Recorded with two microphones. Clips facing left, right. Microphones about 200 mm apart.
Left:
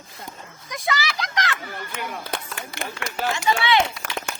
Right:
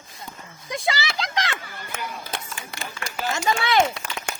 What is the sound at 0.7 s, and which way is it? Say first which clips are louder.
Speech: right 1 dB; 30° right (ahead or behind).